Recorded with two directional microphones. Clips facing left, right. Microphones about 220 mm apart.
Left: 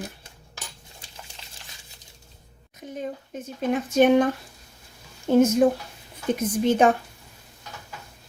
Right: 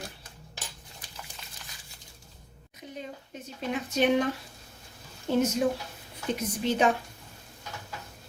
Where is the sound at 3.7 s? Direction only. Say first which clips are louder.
Left 7 dB; 50° left (ahead or behind).